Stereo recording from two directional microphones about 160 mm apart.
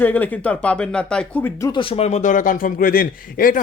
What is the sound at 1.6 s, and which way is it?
A man's voice, 30° left (ahead or behind).